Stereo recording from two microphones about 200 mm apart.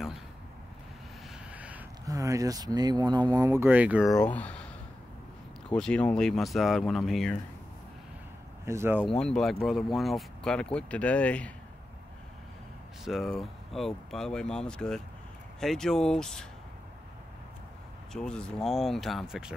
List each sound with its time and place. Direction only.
1.5 s speech: 5° right (ahead or behind)
4.2 s speech: 5° left (ahead or behind)
5.7 s speech: 5° left (ahead or behind)
8.6 s speech: 10° right (ahead or behind)
9.1 s speech: 5° left (ahead or behind)
13.0 s speech: centre (ahead or behind)
18.1 s speech: 5° left (ahead or behind)